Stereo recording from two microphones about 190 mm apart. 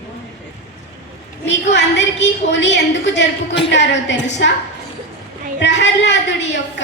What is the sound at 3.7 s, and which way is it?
Speech, 70° left (ahead or behind).